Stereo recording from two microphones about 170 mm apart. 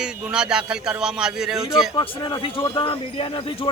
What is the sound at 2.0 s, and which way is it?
Speech, 25° left (ahead or behind).